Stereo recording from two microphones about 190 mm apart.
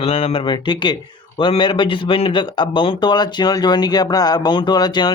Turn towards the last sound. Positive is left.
turn(degrees=20)  # may be behind; listen again after turning